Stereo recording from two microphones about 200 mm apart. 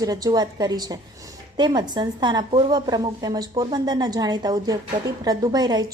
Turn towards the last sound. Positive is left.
turn(degrees=-20)  # may be behind; listen again after turning